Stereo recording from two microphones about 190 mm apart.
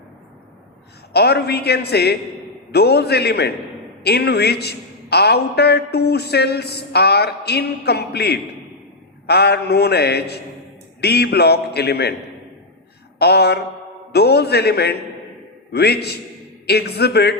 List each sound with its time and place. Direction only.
1.1 s a man's voice: 60° left (ahead or behind)
13.1 s a sound: 60° left (ahead or behind)
14.1 s a man's voice: 60° left (ahead or behind)